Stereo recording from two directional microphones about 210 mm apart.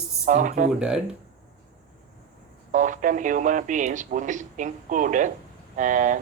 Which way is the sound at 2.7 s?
35° right (ahead or behind).